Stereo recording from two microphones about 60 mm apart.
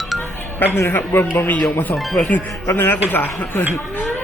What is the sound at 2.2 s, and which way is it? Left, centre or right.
Speech, left.